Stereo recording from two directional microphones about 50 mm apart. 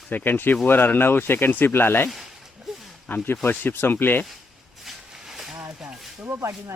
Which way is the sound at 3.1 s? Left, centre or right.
Left.